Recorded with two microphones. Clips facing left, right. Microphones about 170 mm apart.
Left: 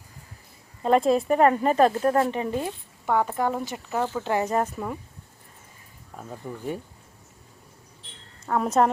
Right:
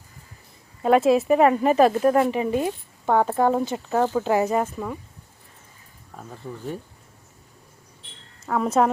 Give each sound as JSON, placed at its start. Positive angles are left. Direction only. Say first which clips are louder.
{"t": 0.8, "sound": "speech", "louder": "right 3 dB", "side_deg": -5}
{"t": 3.1, "sound": "speech", "louder": "right 4 dB", "side_deg": -30}
{"t": 4.5, "sound": "speech", "louder": "right 1 dB", "side_deg": 0}
{"t": 6.3, "sound": "speech", "louder": "left 1 dB", "side_deg": 10}
{"t": 8.4, "sound": "speech", "louder": "right 1 dB", "side_deg": 0}